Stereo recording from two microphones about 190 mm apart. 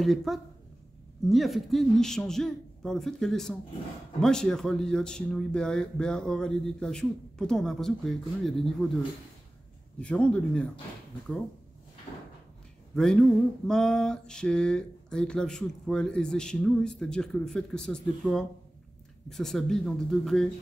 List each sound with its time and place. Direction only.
0.0 s mantra: centre (ahead or behind)
9.9 s mantra: 5° left (ahead or behind)
12.1 s drawer open or close: 25° left (ahead or behind)
12.9 s mantra: 5° left (ahead or behind)